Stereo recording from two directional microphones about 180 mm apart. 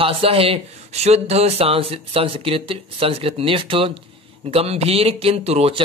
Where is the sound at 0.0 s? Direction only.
30° right (ahead or behind).